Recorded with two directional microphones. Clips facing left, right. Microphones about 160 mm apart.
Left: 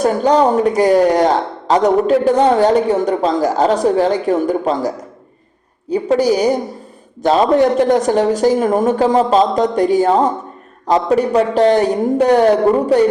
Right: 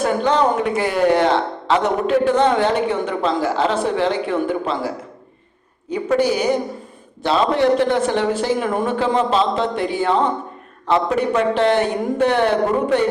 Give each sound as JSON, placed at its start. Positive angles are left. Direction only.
{"t": 0.0, "sound": "speech", "side_deg": 40}